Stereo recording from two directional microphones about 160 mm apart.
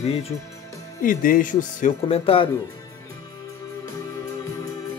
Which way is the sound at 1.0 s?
60° left (ahead or behind).